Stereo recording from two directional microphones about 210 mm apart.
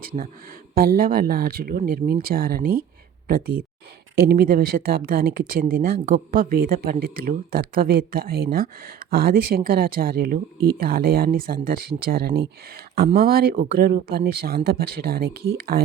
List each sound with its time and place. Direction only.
0.7 s speech: 45° right (ahead or behind)